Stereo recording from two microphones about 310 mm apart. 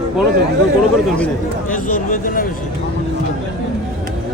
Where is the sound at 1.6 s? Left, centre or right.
Left.